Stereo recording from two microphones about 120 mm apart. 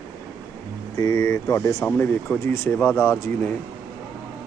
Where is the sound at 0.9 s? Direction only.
25° left (ahead or behind).